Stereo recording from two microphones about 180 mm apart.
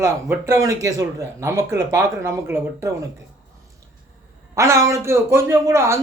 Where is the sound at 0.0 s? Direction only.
15° right (ahead or behind).